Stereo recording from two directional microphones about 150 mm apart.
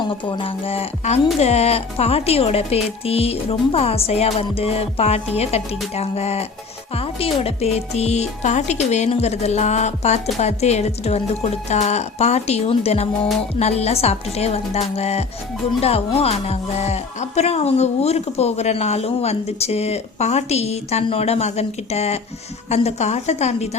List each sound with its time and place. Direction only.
0.3 s speech: 35° left (ahead or behind)